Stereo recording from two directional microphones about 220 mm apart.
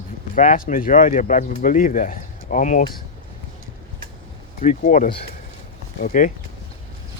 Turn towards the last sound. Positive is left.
turn(degrees=35)  # may be behind; listen again after turning